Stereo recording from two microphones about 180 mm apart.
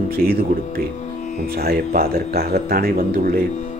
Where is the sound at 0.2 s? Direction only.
55° right (ahead or behind).